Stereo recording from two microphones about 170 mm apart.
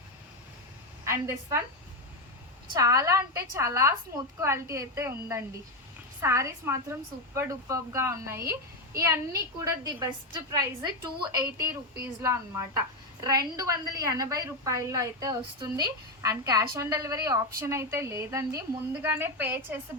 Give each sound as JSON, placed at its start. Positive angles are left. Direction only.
{"t": 1.0, "sound": "a woman's voice", "side_deg": -15}
{"t": 2.7, "sound": "a woman's voice", "side_deg": -20}